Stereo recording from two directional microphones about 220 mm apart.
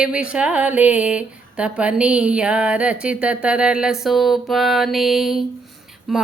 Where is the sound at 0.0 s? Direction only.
5° right (ahead or behind).